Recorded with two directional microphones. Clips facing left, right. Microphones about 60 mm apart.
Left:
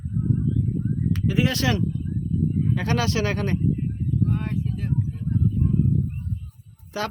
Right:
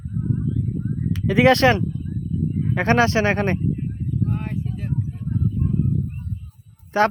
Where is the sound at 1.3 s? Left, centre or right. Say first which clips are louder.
Right 9 dB; right.